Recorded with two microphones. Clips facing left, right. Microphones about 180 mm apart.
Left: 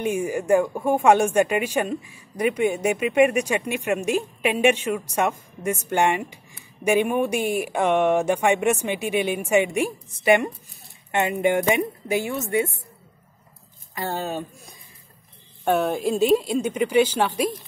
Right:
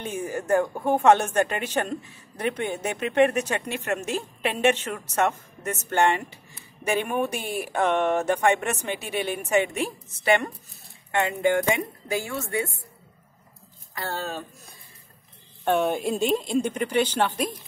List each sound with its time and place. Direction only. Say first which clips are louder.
0.0 s speech: left 6 dB; 10° left (ahead or behind)
13.9 s speech: left 4 dB; 15° left (ahead or behind)
15.6 s speech: left 2 dB; 5° left (ahead or behind)